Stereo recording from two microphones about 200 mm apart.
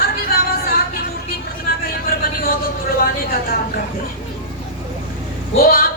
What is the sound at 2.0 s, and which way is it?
Vehicle, 50° left (ahead or behind).